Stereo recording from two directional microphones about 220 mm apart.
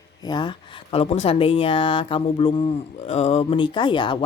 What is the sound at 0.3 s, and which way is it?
Speech, 20° left (ahead or behind).